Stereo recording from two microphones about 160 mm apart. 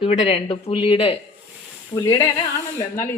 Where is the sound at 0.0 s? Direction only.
40° left (ahead or behind).